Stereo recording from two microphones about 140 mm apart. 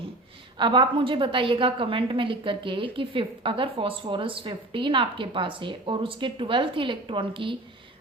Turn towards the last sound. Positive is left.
turn(degrees=-40)  # may be behind; listen again after turning